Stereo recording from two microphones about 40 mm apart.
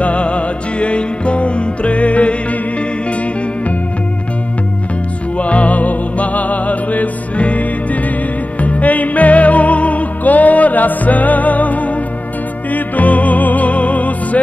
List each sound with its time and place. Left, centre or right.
0.0 s music: left
5.4 s music: left